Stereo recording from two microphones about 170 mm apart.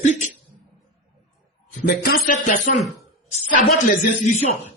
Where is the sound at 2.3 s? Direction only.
45° left (ahead or behind).